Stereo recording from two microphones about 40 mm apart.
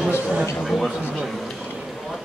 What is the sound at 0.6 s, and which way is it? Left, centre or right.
Speech, centre.